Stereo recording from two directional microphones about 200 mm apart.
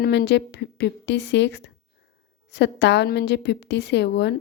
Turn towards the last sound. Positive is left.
turn(degrees=55)  # may be behind; listen again after turning